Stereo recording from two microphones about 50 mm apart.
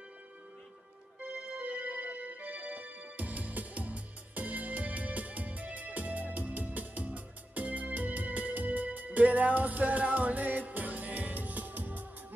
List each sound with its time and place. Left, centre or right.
1.3 s music: right